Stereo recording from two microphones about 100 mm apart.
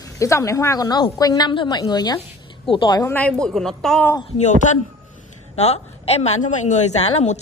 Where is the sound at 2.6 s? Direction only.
60° left (ahead or behind).